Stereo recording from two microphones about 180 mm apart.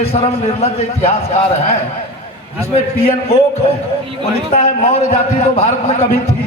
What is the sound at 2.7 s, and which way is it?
Speech, 35° left (ahead or behind).